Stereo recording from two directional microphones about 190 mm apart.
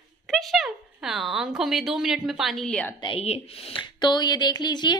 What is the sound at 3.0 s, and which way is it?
A woman's voice, 30° left (ahead or behind).